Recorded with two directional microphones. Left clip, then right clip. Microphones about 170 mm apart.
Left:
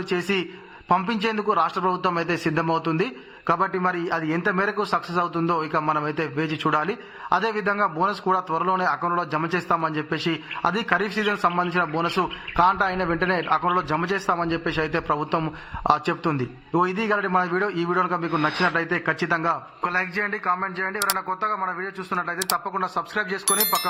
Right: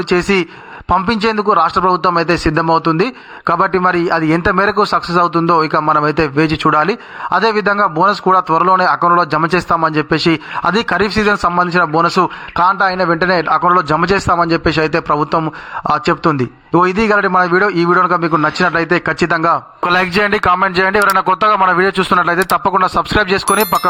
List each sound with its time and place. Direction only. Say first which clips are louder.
0.1 s a man's voice: right 11 dB; 45° right (ahead or behind)
23.5 s speech: right 11 dB; centre (ahead or behind)